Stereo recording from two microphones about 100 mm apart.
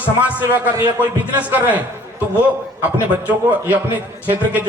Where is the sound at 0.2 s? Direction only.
15° right (ahead or behind).